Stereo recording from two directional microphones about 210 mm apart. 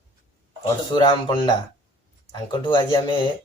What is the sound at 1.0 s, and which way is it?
Speech, 25° left (ahead or behind).